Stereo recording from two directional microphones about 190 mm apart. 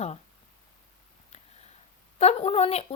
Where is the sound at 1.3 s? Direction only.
35° left (ahead or behind).